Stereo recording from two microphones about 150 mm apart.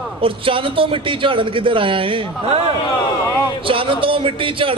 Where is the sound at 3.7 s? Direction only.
35° right (ahead or behind).